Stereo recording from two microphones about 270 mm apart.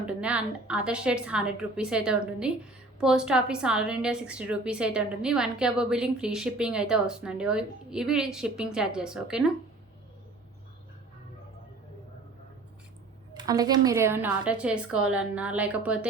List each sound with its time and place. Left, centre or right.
0.0 s a woman's voice: centre
13.3 s a woman's voice: centre